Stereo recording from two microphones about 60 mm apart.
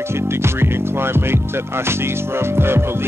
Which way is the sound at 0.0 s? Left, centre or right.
Right.